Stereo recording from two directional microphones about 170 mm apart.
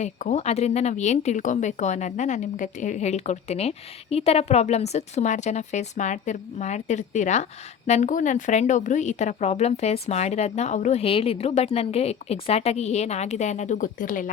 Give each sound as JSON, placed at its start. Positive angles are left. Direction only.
{"t": 0.0, "sound": "speech", "side_deg": 40}